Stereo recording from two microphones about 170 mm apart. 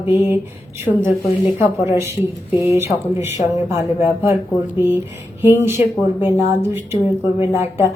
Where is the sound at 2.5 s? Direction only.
15° right (ahead or behind).